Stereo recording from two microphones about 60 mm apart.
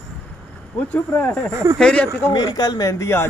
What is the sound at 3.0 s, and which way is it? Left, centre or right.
Speech, left.